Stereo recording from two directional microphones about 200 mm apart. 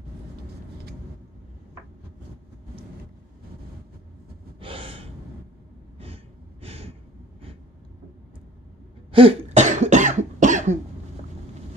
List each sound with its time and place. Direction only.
4.6 s gasp: 25° right (ahead or behind)
5.9 s a sound: 30° right (ahead or behind)
9.1 s cough: 30° right (ahead or behind)